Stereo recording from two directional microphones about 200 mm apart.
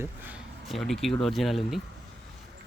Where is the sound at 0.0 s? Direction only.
5° right (ahead or behind).